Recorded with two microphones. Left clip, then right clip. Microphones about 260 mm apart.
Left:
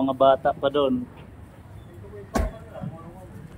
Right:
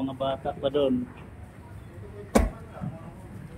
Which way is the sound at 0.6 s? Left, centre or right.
Centre.